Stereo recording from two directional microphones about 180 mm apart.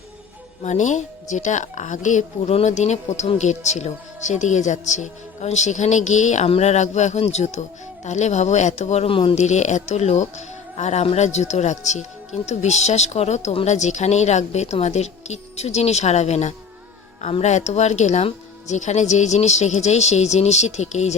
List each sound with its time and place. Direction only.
0.6 s speech: 40° left (ahead or behind)